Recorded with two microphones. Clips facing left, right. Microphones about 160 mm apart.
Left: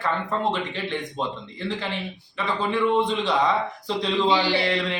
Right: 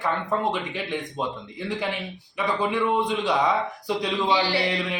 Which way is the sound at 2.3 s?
15° right (ahead or behind).